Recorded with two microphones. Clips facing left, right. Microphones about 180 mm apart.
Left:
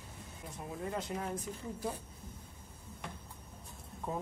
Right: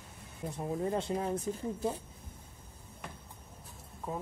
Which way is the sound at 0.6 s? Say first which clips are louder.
Right 6 dB; 30° right (ahead or behind).